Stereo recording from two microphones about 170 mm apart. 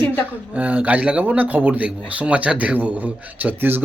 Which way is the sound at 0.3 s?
10° right (ahead or behind).